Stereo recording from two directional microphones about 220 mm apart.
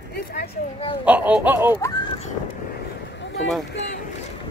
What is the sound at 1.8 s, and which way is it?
Speech, 15° left (ahead or behind).